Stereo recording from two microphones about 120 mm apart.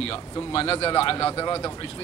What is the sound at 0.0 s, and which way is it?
Speech, 55° left (ahead or behind).